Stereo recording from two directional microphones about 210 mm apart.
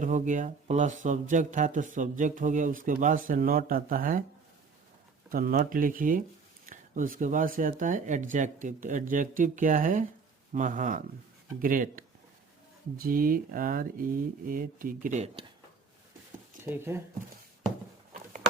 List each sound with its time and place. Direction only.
0.0 s speech: 40° right (ahead or behind)
5.3 s speech: 45° right (ahead or behind)
16.6 s speech: 10° right (ahead or behind)